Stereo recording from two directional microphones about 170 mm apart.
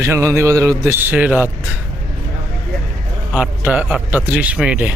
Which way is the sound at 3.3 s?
10° right (ahead or behind).